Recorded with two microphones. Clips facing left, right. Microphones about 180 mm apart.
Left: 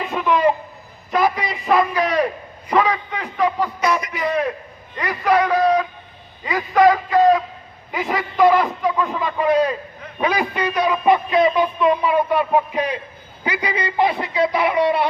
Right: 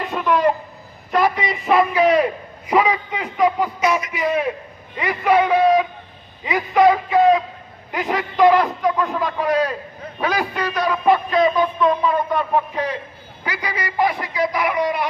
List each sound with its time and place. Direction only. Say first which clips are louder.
0.1 s a sound: even; 5° left (ahead or behind)
7.9 s a man's voice: even; centre (ahead or behind)
11.5 s a man's voice: even; 15° left (ahead or behind); by 15.0 s 30° left (ahead or behind)